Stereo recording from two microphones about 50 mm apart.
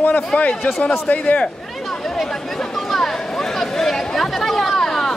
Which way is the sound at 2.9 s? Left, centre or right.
Centre.